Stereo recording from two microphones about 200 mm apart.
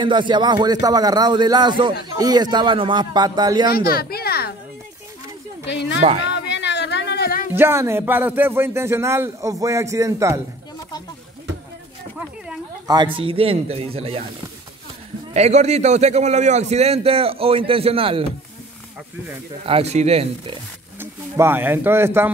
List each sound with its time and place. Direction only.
0.0 s speech: 25° right (ahead or behind)
3.7 s a sound: 50° left (ahead or behind)
5.7 s a woman's voice: 60° left (ahead or behind)
5.9 s speech: 30° right (ahead or behind)
6.3 s a sound: 60° left (ahead or behind)
7.5 s speech: 10° right (ahead or behind)
12.8 s speech: 20° right (ahead or behind)
15.3 s a man's voice: 35° right (ahead or behind)
19.6 s a man's voice: 30° right (ahead or behind)
21.0 s speech: 10° right (ahead or behind)